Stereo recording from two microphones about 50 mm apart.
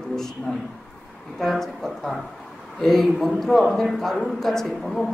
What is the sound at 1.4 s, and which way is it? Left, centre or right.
A man's voice, centre.